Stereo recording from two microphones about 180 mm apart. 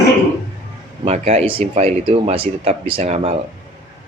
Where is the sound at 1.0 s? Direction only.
35° right (ahead or behind).